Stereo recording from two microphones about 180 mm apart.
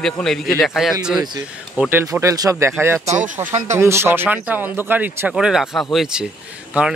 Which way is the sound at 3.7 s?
15° right (ahead or behind).